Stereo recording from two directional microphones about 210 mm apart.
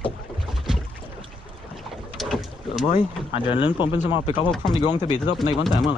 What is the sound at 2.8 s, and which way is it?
Speech, 30° left (ahead or behind).